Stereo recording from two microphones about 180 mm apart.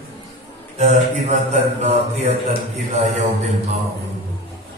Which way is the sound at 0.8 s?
40° right (ahead or behind).